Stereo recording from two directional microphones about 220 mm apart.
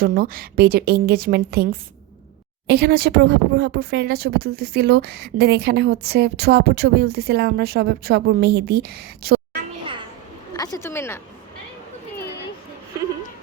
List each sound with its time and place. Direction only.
0.0 s speech: 40° right (ahead or behind)
10.5 s a woman's voice: 15° left (ahead or behind)